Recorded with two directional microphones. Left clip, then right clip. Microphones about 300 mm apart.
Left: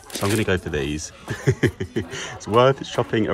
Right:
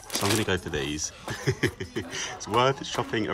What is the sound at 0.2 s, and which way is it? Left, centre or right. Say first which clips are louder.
Speech: left 4 dB; right.